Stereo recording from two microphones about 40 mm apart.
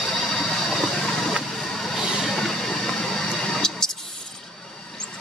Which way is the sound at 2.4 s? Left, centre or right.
Centre.